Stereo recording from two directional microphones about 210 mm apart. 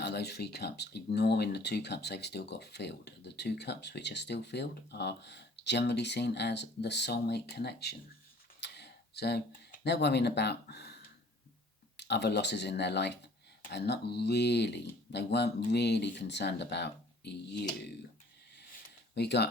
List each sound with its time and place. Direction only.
0.0 s speech: 50° left (ahead or behind)
11.9 s speech: 55° left (ahead or behind)
19.1 s speech: 55° left (ahead or behind)